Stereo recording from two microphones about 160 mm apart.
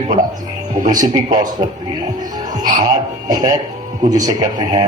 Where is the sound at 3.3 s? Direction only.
25° right (ahead or behind).